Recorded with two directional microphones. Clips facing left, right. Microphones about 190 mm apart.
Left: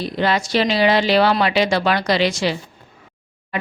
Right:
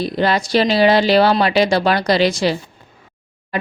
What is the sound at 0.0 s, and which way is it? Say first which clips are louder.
Speech: right 2 dB; 40° right (ahead or behind).